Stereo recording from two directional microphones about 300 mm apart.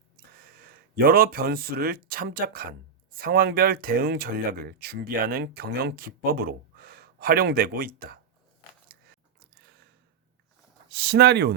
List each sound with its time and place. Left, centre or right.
0.3 s speech: right
10.9 s speech: right